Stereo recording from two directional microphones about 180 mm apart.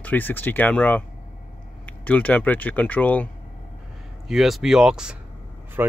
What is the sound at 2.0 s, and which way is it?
Speech, 10° left (ahead or behind).